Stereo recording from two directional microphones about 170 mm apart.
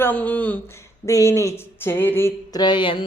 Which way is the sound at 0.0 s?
10° left (ahead or behind).